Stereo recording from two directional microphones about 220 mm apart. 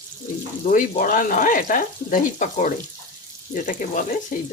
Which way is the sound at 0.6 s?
35° left (ahead or behind).